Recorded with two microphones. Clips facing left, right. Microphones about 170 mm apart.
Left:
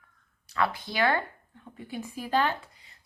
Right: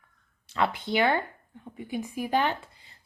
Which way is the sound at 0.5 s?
20° right (ahead or behind).